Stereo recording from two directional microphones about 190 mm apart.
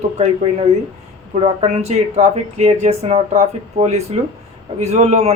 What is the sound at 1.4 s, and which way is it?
Speech, 35° right (ahead or behind).